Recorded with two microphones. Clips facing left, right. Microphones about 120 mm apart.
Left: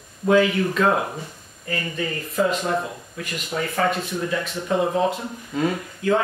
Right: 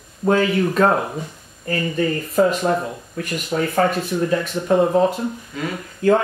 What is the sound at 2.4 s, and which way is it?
Speech, 40° right (ahead or behind).